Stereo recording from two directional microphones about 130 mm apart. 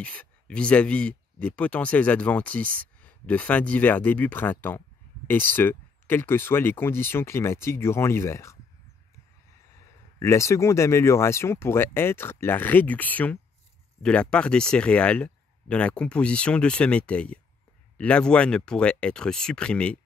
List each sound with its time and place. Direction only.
0.0 s speech: 10° left (ahead or behind)
10.1 s speech: 20° left (ahead or behind)